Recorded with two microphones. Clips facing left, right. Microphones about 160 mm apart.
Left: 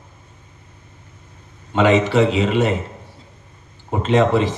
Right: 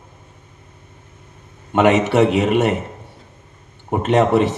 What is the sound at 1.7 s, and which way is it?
A man's voice, 60° right (ahead or behind).